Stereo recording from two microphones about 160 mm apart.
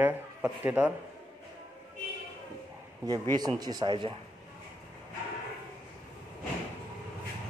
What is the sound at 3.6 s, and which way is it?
Speech, 25° right (ahead or behind).